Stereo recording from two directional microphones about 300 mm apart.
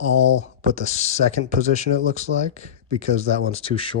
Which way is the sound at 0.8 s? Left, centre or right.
Left.